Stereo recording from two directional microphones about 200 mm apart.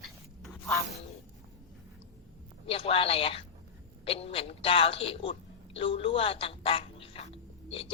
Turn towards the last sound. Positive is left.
turn(degrees=30)  # may be behind; listen again after turning